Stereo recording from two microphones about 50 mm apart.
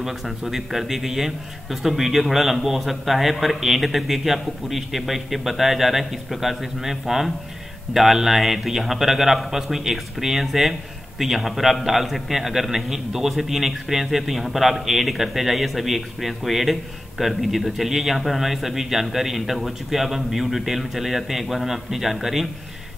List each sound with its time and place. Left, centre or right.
0.0 s a man's voice: centre